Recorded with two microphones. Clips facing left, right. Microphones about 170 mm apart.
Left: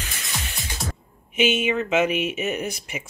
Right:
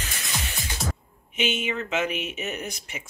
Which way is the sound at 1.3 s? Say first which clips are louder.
Left 6 dB; 5° left (ahead or behind).